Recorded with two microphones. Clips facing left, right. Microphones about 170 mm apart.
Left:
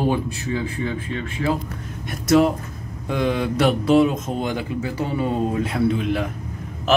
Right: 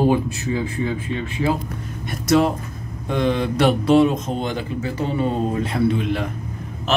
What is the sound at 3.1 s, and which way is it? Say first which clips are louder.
A man's voice: right 1 dB; 5° left (ahead or behind).